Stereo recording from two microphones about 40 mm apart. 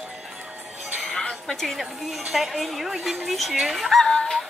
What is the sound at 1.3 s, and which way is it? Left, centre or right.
Speech, centre.